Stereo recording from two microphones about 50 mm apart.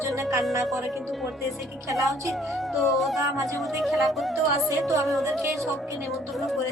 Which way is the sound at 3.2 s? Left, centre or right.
Right.